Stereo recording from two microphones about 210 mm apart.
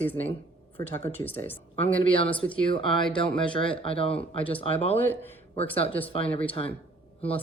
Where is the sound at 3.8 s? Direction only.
25° left (ahead or behind).